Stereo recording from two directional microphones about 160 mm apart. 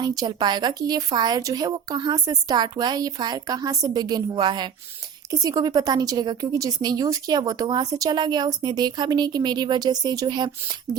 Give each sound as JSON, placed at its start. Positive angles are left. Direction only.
{"t": 0.0, "sound": "a woman's voice", "side_deg": -25}